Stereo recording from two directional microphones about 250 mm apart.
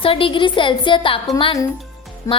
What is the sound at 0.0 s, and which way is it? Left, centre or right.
A woman's voice, left.